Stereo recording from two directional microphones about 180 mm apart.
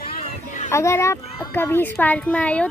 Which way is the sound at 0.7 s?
15° left (ahead or behind).